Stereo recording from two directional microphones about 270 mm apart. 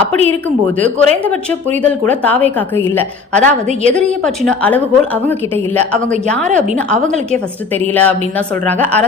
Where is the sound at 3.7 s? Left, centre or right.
Right.